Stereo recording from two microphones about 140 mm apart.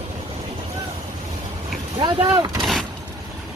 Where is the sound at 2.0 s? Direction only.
30° right (ahead or behind).